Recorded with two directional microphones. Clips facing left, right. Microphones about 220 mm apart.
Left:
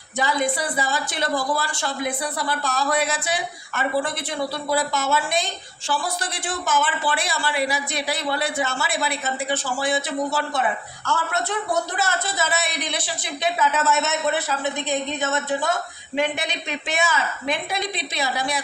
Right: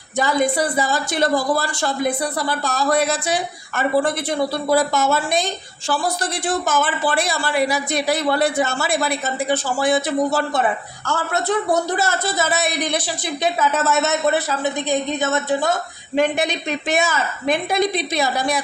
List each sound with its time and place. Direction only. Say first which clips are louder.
0.2 s speech: right 5 dB; 45° right (ahead or behind)